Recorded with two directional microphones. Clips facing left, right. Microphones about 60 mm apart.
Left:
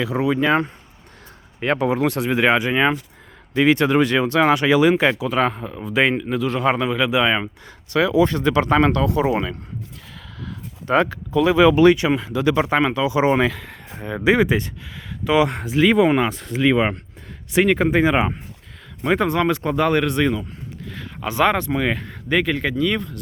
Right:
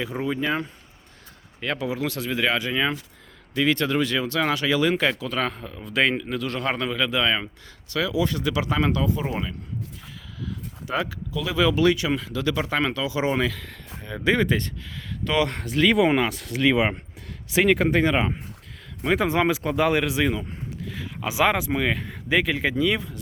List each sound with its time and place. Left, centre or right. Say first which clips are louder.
0.2 s speech: left 8 dB; left
1.6 s speech: left 8 dB; left; by 7.3 s centre
7.9 s speech: left 7 dB; left
10.4 s speech: left 3 dB; left; by 18.1 s centre
18.1 s speech: left 4 dB; left
19.3 s speech: left 2 dB; centre
21.8 s speech: left 3 dB; centre
22.0 s speech: left 2 dB; centre